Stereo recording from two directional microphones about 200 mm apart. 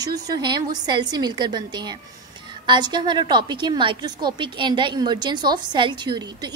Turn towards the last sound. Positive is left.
turn(degrees=-20)  # may be behind; listen again after turning